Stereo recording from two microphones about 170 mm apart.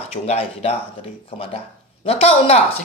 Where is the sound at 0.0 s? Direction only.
35° left (ahead or behind).